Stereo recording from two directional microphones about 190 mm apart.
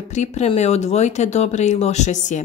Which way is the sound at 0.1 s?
35° left (ahead or behind).